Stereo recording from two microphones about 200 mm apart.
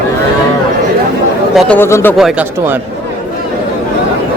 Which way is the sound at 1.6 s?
10° left (ahead or behind).